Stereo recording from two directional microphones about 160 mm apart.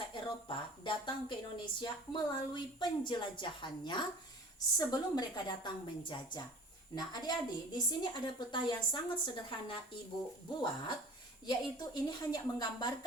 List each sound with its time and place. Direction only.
0.1 s a woman's voice: 30° left (ahead or behind)